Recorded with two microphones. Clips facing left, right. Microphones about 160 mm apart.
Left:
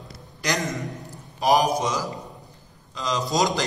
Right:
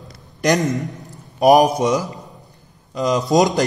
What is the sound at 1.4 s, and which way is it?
A man's voice, 60° right (ahead or behind).